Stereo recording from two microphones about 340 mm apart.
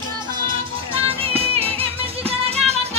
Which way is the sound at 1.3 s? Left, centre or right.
Centre.